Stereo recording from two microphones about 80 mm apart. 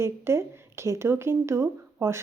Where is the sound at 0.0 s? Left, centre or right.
Right.